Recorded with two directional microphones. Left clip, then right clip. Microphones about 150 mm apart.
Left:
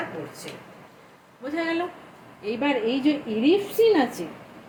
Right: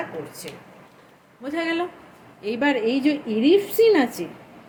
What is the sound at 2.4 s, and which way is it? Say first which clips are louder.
A woman's voice: right 3 dB; 30° right (ahead or behind).